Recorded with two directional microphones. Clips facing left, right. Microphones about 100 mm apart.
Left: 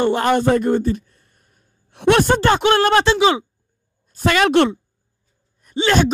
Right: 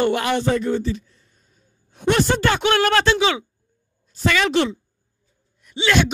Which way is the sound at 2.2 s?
45° left (ahead or behind).